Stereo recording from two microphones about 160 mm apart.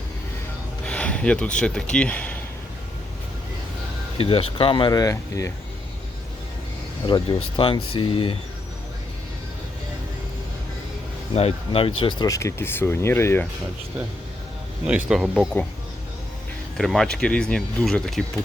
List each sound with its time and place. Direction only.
0.9 s speech: 5° left (ahead or behind)
4.2 s speech: 35° left (ahead or behind); by 5.5 s 20° left (ahead or behind)
7.0 s speech: 30° left (ahead or behind)
11.3 s speech: 35° left (ahead or behind); by 13.5 s 15° left (ahead or behind)
14.8 s speech: 5° right (ahead or behind)
16.7 s speech: centre (ahead or behind)